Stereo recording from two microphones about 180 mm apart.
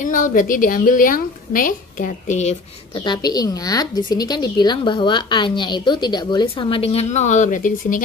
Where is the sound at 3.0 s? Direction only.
25° left (ahead or behind).